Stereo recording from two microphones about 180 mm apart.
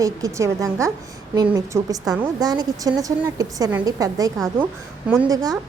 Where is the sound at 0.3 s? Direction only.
15° right (ahead or behind).